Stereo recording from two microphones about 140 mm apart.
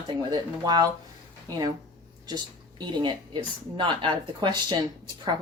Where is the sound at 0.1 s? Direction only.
30° right (ahead or behind).